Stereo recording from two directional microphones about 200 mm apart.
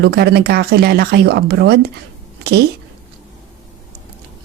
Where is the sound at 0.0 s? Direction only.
55° right (ahead or behind).